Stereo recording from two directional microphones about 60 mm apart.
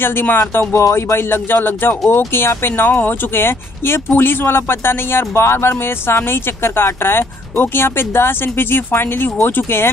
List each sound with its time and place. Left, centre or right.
0.0 s speech: left
0.8 s speech: left